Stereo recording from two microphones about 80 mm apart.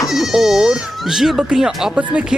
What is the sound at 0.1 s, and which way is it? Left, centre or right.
Speech, centre.